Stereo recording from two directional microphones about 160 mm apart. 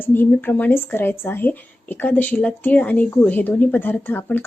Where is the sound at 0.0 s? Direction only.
15° left (ahead or behind).